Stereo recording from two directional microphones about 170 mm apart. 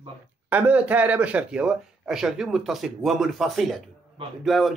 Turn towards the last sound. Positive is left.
turn(degrees=0)  # may be behind; listen again after turning